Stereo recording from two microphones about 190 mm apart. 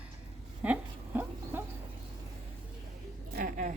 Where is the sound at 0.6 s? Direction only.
10° right (ahead or behind).